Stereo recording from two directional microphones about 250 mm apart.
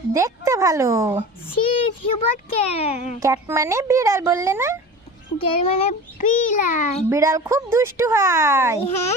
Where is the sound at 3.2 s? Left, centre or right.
Centre.